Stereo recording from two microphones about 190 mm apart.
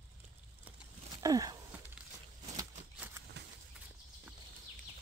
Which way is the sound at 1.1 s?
20° right (ahead or behind).